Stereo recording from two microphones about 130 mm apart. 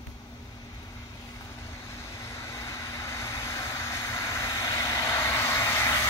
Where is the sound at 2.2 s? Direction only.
25° left (ahead or behind).